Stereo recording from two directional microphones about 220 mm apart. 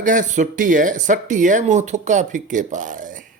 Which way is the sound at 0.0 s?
35° right (ahead or behind).